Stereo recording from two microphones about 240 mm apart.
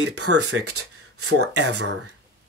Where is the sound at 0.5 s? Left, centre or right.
Right.